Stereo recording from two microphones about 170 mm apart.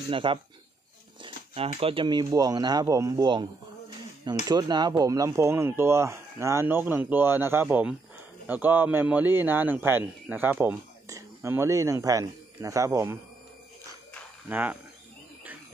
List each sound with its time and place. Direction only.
0.1 s speech: 30° right (ahead or behind)
1.2 s a sound: 30° right (ahead or behind)
1.7 s speech: 35° right (ahead or behind)
4.5 s a man's voice: 25° right (ahead or behind)
14.5 s a man's voice: 10° right (ahead or behind)